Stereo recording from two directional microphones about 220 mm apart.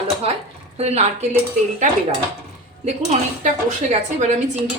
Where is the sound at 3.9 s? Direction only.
30° right (ahead or behind).